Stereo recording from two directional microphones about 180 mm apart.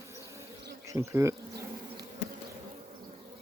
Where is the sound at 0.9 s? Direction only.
15° right (ahead or behind).